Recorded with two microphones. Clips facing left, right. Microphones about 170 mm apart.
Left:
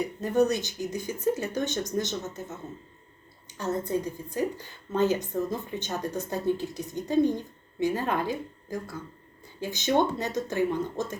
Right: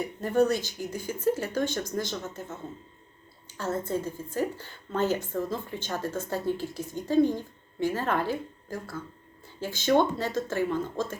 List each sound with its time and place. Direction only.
0.3 s speech: 20° left (ahead or behind)
3.4 s a woman's voice: 20° left (ahead or behind)